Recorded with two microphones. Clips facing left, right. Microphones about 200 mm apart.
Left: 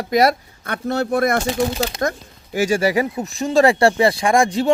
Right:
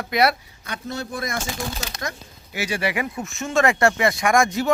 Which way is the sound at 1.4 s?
35° left (ahead or behind).